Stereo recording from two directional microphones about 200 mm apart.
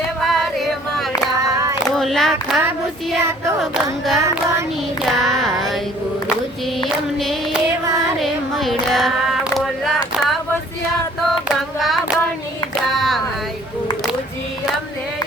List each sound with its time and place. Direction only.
0.2 s music: centre (ahead or behind)
1.5 s female singing: 15° right (ahead or behind)
2.0 s a sound: centre (ahead or behind)
2.6 s child singing: 10° right (ahead or behind)
3.6 s a sound: centre (ahead or behind)
5.0 s child singing: centre (ahead or behind)
8.2 s female singing: centre (ahead or behind)
11.4 s child singing: centre (ahead or behind)
12.9 s a sound: centre (ahead or behind)